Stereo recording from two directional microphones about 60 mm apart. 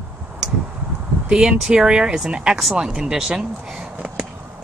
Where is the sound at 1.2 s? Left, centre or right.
Centre.